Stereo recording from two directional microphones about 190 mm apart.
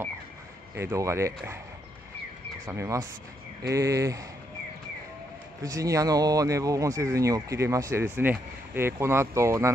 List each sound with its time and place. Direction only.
0.7 s speech: 15° right (ahead or behind)
2.6 s speech: 15° right (ahead or behind)
5.6 s speech: 15° right (ahead or behind)